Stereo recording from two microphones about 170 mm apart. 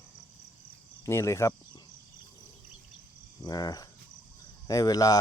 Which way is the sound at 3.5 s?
20° left (ahead or behind).